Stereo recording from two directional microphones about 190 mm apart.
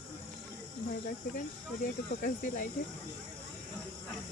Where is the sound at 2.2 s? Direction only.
45° left (ahead or behind).